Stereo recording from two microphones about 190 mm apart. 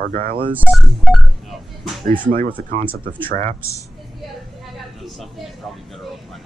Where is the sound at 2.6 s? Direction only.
45° right (ahead or behind).